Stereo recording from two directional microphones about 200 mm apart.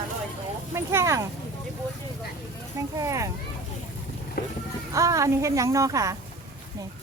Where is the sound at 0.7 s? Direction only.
15° right (ahead or behind).